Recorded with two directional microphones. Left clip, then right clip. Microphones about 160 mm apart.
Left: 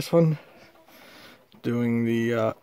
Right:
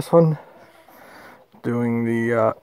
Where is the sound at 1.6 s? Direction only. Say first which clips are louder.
Right 3 dB; 20° left (ahead or behind).